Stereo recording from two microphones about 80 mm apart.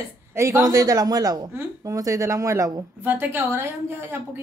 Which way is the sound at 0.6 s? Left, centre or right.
Right.